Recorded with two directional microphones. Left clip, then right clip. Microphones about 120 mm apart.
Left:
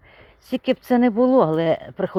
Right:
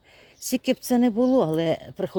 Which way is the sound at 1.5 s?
25° right (ahead or behind).